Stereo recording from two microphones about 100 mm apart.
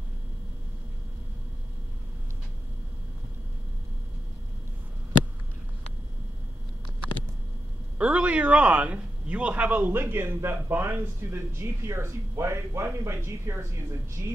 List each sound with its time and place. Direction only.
8.0 s a man's voice: 15° right (ahead or behind); by 14.3 s 30° right (ahead or behind)